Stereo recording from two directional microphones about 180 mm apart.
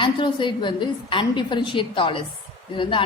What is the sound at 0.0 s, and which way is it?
A woman's voice, 25° left (ahead or behind).